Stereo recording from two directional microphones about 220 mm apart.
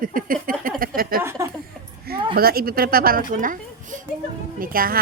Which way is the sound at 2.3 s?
45° right (ahead or behind).